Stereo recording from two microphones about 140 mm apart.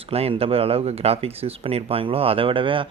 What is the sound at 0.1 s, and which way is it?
Speech, 45° right (ahead or behind).